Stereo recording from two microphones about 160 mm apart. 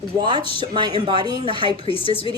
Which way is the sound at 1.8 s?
35° left (ahead or behind).